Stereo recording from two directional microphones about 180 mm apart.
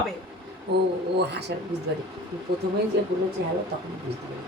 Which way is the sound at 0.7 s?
70° right (ahead or behind).